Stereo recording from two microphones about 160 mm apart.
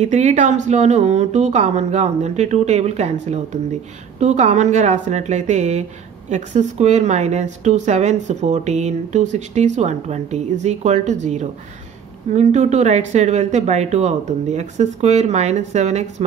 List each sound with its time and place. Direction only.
0.0 s a woman's voice: 45° right (ahead or behind)